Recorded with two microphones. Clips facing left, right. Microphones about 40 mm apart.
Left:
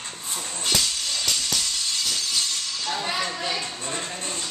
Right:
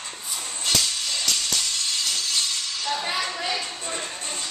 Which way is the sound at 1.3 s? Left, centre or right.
Centre.